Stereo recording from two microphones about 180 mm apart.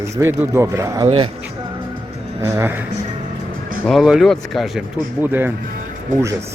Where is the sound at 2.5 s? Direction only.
15° right (ahead or behind).